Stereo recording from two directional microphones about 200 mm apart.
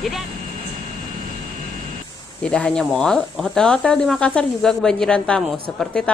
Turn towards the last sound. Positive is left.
turn(degrees=5)  # may be behind; listen again after turning